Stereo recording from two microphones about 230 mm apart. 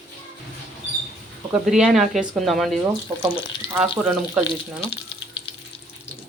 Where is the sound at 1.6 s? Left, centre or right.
Centre.